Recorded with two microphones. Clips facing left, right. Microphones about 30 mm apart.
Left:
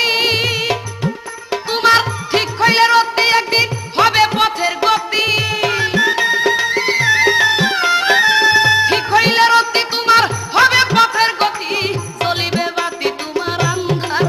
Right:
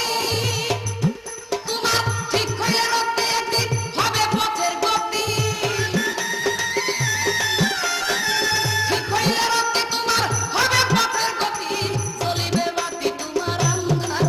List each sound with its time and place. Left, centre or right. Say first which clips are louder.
0.0 s music: left 8 dB; left
0.4 s music: left 6 dB; left
5.2 s music: left 7 dB; left
11.2 s music: left 8 dB; left
11.4 s music: left 6 dB; left